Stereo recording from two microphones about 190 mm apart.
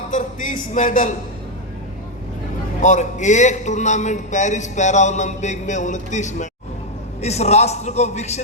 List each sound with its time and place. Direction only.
0.1 s music: 45° left (ahead or behind)
2.8 s a man's voice: 40° left (ahead or behind)